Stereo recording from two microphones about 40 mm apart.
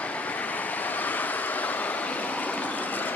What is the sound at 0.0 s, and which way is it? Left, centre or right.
Vehicle, left.